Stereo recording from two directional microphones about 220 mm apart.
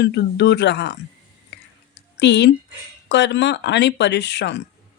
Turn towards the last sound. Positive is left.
turn(degrees=50)  # may be behind; listen again after turning